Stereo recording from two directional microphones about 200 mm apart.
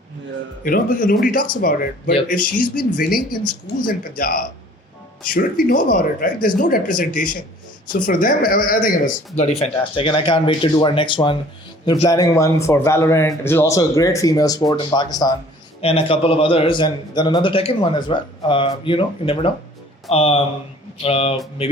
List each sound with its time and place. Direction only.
0.6 s speech: 45° left (ahead or behind)
9.6 s a man's voice: 25° left (ahead or behind)